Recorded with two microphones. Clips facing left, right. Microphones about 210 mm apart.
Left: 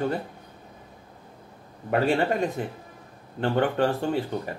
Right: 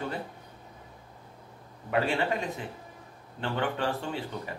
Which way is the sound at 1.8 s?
50° left (ahead or behind).